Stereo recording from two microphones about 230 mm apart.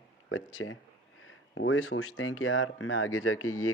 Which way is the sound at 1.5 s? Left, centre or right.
Left.